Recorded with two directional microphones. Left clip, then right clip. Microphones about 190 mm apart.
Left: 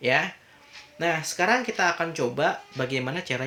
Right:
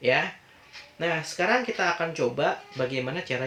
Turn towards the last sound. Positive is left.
turn(degrees=45)  # may be behind; listen again after turning